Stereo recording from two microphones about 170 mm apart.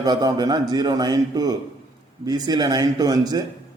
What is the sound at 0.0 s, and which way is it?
A man's voice, 20° right (ahead or behind).